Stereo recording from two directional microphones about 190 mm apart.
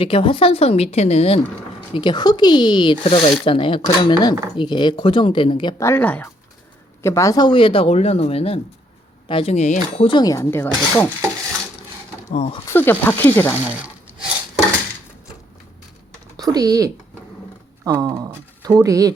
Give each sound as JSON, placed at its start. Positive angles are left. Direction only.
{"t": 0.0, "sound": "speech", "side_deg": 30}
{"t": 5.8, "sound": "speech", "side_deg": 10}
{"t": 12.3, "sound": "speech", "side_deg": 35}
{"t": 12.6, "sound": "speech", "side_deg": 10}
{"t": 13.6, "sound": "a sound", "side_deg": -5}
{"t": 16.4, "sound": "speech", "side_deg": -20}